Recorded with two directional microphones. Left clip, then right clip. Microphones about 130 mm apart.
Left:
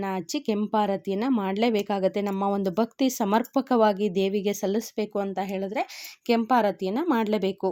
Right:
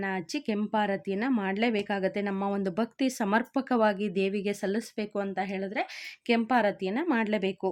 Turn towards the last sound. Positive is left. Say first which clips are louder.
# left 3 dB
turn(degrees=25)  # may be behind; listen again after turning